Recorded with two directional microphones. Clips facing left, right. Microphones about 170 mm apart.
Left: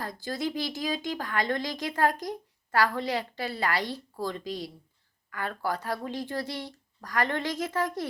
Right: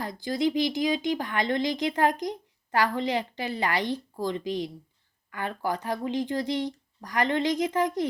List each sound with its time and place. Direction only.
0.0 s speech: 15° right (ahead or behind)